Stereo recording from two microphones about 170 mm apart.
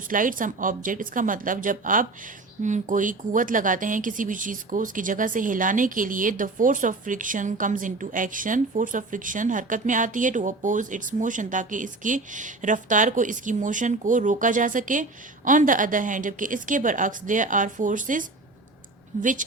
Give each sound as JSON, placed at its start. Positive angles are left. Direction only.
{"t": 0.1, "sound": "speech", "side_deg": -50}